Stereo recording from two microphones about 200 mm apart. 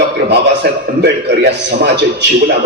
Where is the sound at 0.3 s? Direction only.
55° right (ahead or behind).